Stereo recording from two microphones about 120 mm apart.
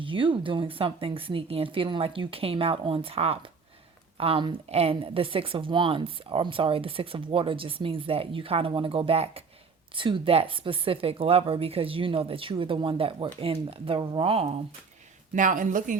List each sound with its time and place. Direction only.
0.0 s a woman's voice: 45° right (ahead or behind)
9.9 s a woman's voice: 45° right (ahead or behind)
15.4 s speech: 90° right